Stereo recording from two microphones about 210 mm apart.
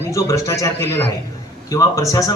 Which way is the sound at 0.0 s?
15° left (ahead or behind).